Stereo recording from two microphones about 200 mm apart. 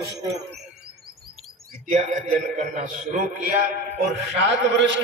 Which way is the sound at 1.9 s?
35° right (ahead or behind).